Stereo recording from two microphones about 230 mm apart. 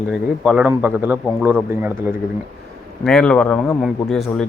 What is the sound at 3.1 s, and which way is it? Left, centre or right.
A man's voice, centre.